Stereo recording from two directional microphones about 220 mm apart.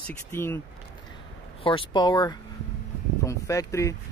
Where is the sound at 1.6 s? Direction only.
25° left (ahead or behind).